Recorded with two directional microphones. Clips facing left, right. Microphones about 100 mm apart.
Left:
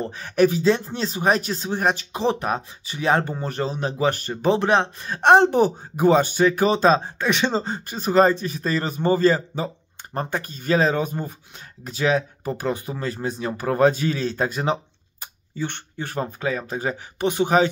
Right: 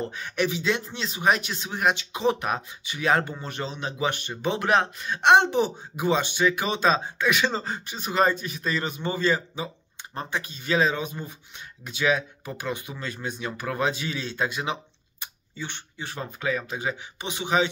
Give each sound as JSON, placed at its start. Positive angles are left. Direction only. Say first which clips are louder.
{"t": 0.0, "sound": "speech", "louder": "left 8 dB", "side_deg": 35}
{"t": 7.8, "sound": "speech", "louder": "left 6 dB", "side_deg": 40}